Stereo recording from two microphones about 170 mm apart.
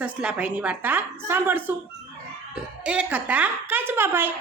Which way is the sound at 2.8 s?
5° right (ahead or behind).